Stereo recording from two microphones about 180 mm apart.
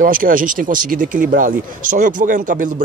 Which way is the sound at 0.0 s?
50° right (ahead or behind).